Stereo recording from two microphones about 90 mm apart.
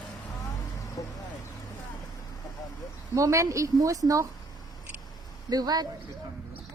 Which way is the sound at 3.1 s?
35° right (ahead or behind).